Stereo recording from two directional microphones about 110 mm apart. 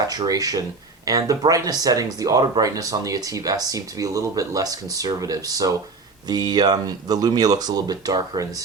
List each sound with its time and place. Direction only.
0.1 s speech: 35° right (ahead or behind)